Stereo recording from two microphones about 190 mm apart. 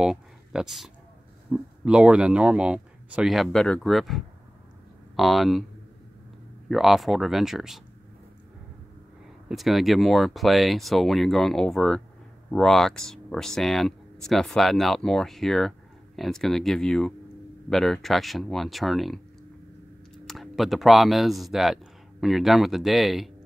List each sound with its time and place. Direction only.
0.0 s a sound: 5° right (ahead or behind)
1.5 s speech: 5° right (ahead or behind)
6.7 s speech: centre (ahead or behind)
9.5 s speech: centre (ahead or behind)
20.2 s speech: centre (ahead or behind)